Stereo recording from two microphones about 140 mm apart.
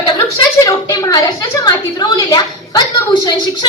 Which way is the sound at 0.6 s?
25° left (ahead or behind).